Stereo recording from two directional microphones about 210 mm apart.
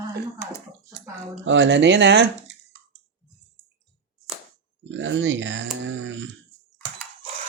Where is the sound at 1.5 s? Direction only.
60° right (ahead or behind).